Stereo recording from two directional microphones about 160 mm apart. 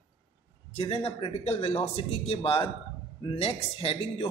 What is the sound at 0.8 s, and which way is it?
Speech, 35° left (ahead or behind).